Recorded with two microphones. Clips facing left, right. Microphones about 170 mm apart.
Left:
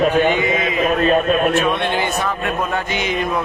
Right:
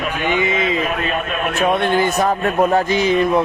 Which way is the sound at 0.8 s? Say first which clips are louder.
Left 5 dB; 35° left (ahead or behind).